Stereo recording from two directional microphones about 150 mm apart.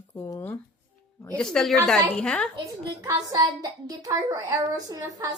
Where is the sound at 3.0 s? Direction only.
25° right (ahead or behind).